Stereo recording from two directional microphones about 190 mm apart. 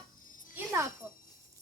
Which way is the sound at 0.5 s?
15° right (ahead or behind).